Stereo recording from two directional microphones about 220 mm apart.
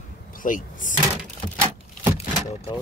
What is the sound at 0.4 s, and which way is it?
Speech, 35° left (ahead or behind).